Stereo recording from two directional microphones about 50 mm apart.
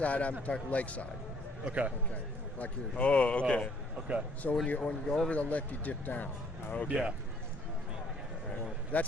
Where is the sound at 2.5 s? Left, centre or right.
Left.